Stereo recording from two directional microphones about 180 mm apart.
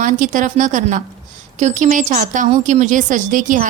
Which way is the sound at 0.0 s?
45° right (ahead or behind).